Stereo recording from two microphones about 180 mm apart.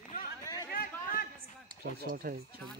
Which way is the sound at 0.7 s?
55° left (ahead or behind).